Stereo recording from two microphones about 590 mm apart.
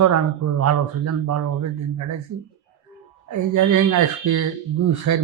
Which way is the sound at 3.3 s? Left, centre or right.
Right.